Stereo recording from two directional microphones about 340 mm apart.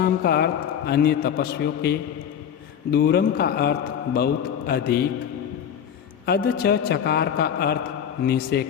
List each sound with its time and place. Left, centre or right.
0.0 s a man's voice: left
6.2 s a man's voice: left